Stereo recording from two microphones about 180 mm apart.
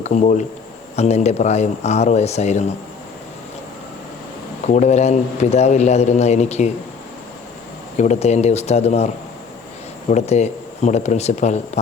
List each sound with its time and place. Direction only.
0.0 s a man's voice: 40° left (ahead or behind)
4.6 s a man's voice: 40° left (ahead or behind)
7.9 s a man's voice: 40° left (ahead or behind)
10.1 s a man's voice: 40° left (ahead or behind)